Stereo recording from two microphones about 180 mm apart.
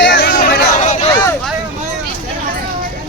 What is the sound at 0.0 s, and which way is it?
Chatter, 70° left (ahead or behind).